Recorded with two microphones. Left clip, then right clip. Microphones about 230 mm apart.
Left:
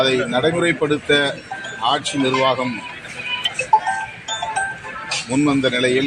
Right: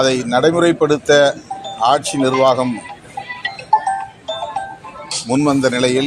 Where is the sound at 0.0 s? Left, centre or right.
Right.